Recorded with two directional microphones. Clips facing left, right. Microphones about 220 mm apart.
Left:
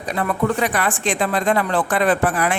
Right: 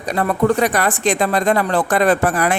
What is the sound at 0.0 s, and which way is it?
Speech, 40° right (ahead or behind).